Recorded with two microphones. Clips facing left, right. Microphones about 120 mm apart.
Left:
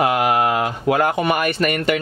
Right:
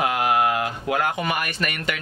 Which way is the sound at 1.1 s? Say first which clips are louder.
Left 7 dB; 65° left (ahead or behind).